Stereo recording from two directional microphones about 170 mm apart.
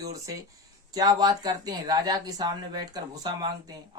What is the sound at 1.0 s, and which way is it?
Speech, 25° right (ahead or behind).